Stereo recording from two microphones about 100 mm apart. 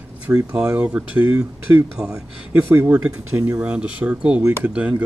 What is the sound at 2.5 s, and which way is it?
Speech, 20° right (ahead or behind).